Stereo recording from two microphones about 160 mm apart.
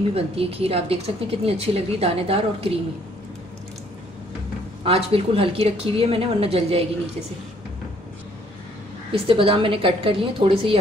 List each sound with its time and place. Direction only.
0.1 s a woman's voice: 40° right (ahead or behind)
4.8 s a woman's voice: 35° right (ahead or behind)
9.1 s a woman's voice: 35° right (ahead or behind)